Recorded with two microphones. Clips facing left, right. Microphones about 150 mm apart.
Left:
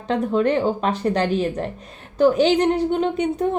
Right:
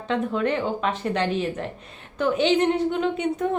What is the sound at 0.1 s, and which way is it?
A woman's voice, 35° left (ahead or behind).